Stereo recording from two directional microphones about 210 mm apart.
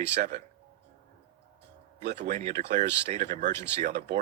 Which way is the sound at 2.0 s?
50° right (ahead or behind).